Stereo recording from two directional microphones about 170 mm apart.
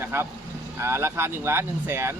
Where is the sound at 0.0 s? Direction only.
15° right (ahead or behind).